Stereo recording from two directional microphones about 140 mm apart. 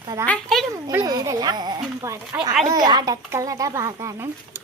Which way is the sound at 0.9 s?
25° right (ahead or behind).